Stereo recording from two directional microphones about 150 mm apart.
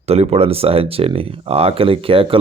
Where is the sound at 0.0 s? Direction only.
45° right (ahead or behind).